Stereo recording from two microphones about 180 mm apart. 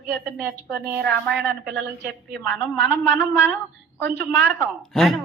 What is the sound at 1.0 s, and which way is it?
Speech, 5° left (ahead or behind).